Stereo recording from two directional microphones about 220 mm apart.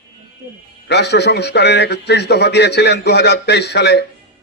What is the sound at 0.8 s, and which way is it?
A man's voice, 50° left (ahead or behind).